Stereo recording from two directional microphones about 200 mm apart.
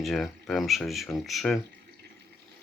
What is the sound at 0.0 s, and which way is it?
Speech, centre (ahead or behind).